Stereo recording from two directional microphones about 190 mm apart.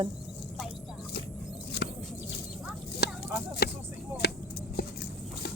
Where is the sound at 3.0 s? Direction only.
60° left (ahead or behind).